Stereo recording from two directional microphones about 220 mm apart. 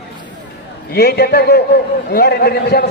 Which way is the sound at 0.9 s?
45° left (ahead or behind).